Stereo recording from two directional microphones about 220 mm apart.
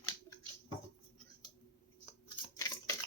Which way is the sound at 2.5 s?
15° left (ahead or behind).